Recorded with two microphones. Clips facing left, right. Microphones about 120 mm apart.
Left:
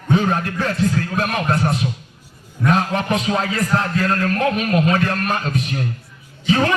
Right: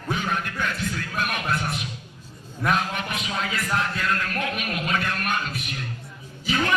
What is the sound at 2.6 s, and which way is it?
A man's voice, 35° left (ahead or behind).